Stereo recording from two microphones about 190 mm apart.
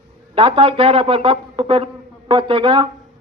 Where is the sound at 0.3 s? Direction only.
30° right (ahead or behind).